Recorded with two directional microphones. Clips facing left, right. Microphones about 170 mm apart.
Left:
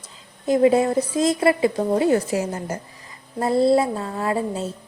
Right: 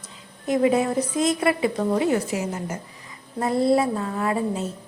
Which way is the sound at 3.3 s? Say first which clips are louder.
Left 2 dB; 30° left (ahead or behind).